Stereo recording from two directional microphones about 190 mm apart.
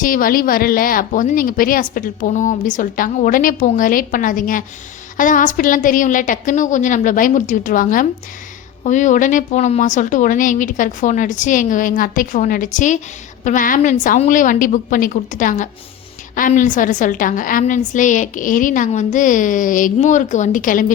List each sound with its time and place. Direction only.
0.0 s a woman's voice: 45° left (ahead or behind)